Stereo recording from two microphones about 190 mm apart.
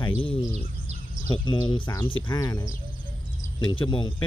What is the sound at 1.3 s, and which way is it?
Speech, 25° left (ahead or behind).